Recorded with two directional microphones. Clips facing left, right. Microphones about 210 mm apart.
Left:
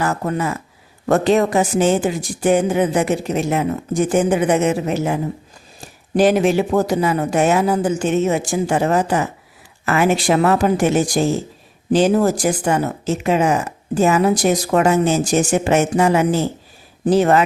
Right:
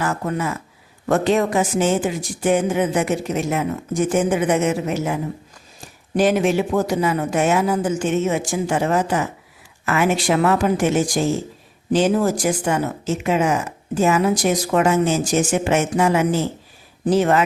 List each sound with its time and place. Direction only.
0.0 s a woman's voice: 40° left (ahead or behind)
6.1 s a woman's voice: 35° left (ahead or behind)